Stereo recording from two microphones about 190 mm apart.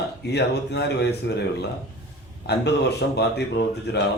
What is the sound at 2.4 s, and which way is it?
Speech, 60° left (ahead or behind).